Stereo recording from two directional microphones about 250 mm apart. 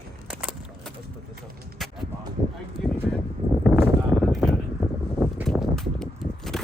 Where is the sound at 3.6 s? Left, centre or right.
Centre.